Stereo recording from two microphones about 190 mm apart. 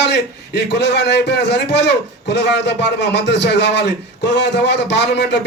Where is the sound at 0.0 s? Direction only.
65° left (ahead or behind).